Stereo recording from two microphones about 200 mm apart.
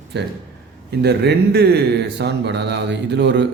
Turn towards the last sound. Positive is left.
turn(degrees=-60)  # may be behind; listen again after turning